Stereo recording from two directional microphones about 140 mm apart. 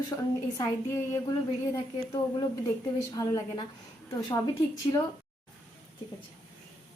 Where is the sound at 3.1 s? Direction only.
30° left (ahead or behind).